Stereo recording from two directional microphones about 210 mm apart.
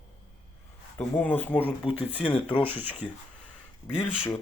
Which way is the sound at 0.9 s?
10° left (ahead or behind).